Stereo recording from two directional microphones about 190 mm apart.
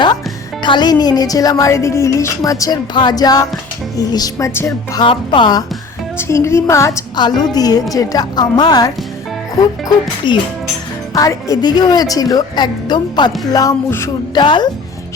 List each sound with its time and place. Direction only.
0.6 s a woman's voice: 25° left (ahead or behind)
10.3 s speech: 25° left (ahead or behind)